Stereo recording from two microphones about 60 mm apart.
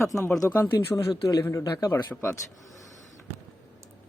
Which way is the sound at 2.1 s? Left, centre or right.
Centre.